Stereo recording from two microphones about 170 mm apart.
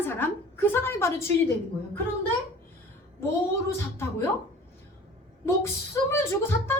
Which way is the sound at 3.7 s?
15° left (ahead or behind).